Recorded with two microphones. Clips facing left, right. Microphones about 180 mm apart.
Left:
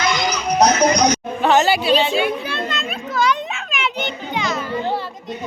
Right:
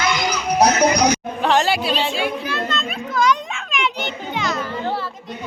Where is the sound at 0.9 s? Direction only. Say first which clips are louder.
Even; 5° right (ahead or behind).